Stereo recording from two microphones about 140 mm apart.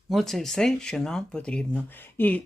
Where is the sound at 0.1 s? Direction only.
Centre (ahead or behind).